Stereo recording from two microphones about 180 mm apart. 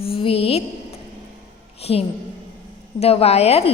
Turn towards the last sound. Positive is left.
turn(degrees=35)  # may be behind; listen again after turning